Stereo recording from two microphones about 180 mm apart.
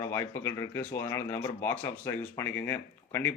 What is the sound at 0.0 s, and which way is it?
A man's voice, 15° left (ahead or behind).